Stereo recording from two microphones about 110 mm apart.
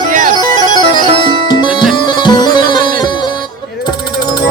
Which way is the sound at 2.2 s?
40° left (ahead or behind).